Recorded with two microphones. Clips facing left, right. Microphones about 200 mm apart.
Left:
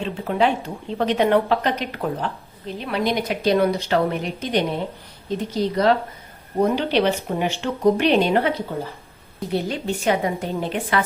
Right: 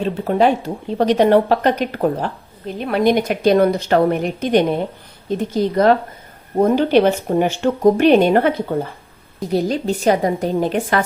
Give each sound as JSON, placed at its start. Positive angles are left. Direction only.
{"t": 0.0, "sound": "a woman's voice", "side_deg": -40}
{"t": 9.5, "sound": "a woman's voice", "side_deg": -40}